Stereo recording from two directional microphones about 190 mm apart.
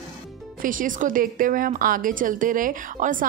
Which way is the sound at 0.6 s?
45° right (ahead or behind).